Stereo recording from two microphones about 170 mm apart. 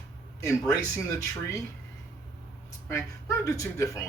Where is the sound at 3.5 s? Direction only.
20° left (ahead or behind).